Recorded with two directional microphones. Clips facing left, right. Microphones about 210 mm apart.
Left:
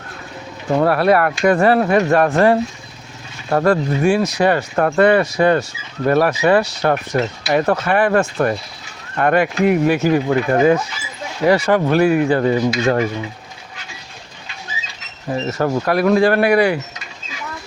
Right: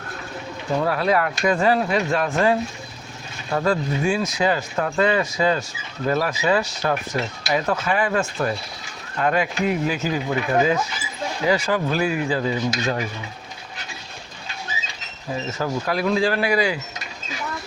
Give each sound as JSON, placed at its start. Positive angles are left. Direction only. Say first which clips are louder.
{"t": 0.8, "sound": "speech", "louder": "left 7 dB", "side_deg": 65}
{"t": 15.3, "sound": "speech", "louder": "left 6 dB", "side_deg": 60}